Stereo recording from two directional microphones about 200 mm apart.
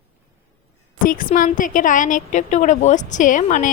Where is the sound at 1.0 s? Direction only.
40° left (ahead or behind).